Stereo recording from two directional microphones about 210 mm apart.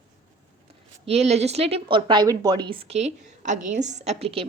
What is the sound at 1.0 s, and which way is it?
A woman's voice, 30° right (ahead or behind).